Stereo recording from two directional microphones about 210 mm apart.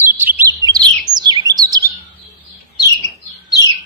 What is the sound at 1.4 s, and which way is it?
Chirp, 20° right (ahead or behind).